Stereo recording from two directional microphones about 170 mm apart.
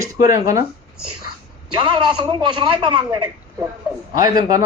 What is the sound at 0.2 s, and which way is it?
Speech, 20° right (ahead or behind).